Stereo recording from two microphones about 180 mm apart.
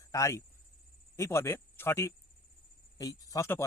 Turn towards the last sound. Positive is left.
turn(degrees=15)  # may be behind; listen again after turning